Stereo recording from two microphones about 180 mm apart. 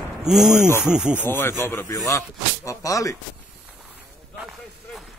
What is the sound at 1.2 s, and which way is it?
Speech, 10° left (ahead or behind).